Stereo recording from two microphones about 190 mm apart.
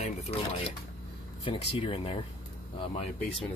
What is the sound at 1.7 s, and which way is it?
Speech, 30° left (ahead or behind).